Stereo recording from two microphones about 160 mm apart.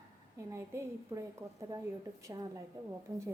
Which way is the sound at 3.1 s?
15° right (ahead or behind).